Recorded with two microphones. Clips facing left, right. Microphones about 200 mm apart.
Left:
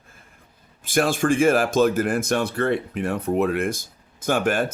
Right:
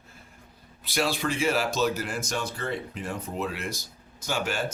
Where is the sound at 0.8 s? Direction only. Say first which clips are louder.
Left 8 dB; 50° left (ahead or behind).